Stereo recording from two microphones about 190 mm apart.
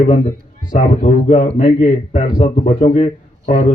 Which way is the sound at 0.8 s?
35° left (ahead or behind).